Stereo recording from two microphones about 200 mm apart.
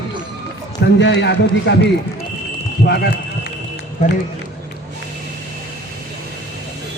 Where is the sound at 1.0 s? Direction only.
60° left (ahead or behind).